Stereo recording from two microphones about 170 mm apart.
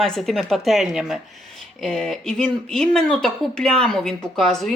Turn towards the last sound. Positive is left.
turn(degrees=0)  # may be behind; listen again after turning